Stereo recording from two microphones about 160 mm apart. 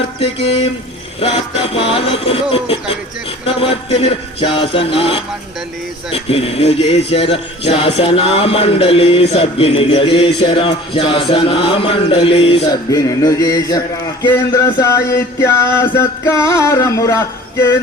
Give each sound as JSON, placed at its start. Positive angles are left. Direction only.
{"t": 1.2, "sound": "speech", "side_deg": 35}
{"t": 12.9, "sound": "speech", "side_deg": 20}